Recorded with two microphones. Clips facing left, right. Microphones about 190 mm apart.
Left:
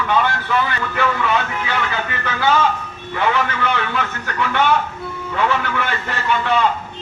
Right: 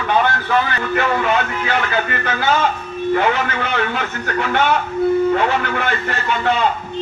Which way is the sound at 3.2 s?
50° right (ahead or behind).